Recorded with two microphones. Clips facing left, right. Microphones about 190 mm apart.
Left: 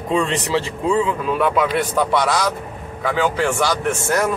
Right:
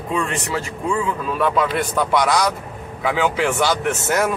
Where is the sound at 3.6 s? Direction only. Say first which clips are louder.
Even; centre (ahead or behind).